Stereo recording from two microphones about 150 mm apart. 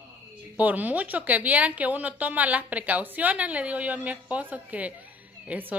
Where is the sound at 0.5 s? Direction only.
10° right (ahead or behind).